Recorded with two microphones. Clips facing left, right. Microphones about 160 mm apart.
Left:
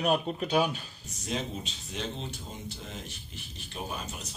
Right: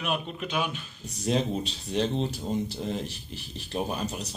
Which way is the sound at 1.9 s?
35° right (ahead or behind).